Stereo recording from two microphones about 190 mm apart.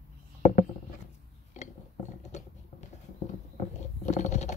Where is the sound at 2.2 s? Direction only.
35° left (ahead or behind).